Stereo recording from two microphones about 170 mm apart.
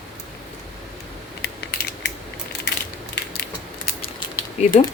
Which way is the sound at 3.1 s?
80° left.